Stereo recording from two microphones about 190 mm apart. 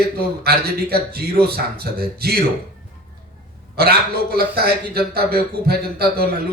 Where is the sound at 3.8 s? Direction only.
55° right (ahead or behind).